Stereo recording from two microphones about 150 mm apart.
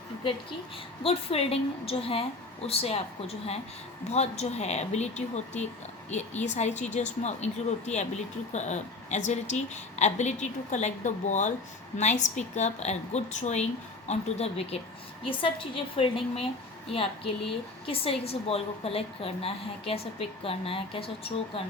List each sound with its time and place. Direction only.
1.0 s a woman's voice: 40° left (ahead or behind)